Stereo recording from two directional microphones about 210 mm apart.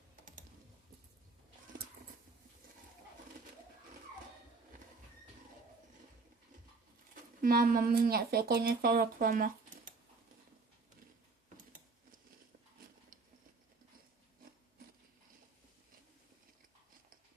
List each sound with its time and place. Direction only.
7.4 s speech: 45° right (ahead or behind)